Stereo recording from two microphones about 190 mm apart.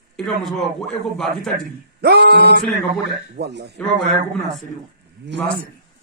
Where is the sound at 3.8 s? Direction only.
Centre (ahead or behind).